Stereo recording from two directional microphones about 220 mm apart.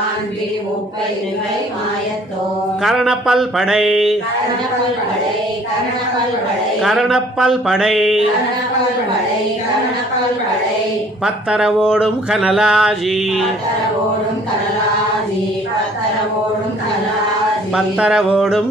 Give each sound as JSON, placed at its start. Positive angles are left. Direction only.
{"t": 2.8, "sound": "speech", "side_deg": 0}
{"t": 6.8, "sound": "speech", "side_deg": 0}
{"t": 11.2, "sound": "speech", "side_deg": -5}
{"t": 17.7, "sound": "speech", "side_deg": -5}